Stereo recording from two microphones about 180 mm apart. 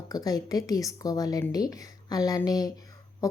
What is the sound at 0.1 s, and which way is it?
Speech, 20° left (ahead or behind).